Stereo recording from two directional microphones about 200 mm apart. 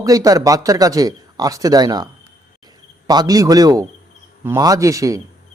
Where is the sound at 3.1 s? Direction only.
20° right (ahead or behind).